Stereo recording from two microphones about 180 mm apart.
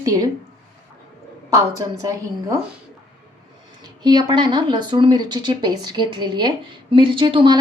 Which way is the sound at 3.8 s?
25° right (ahead or behind).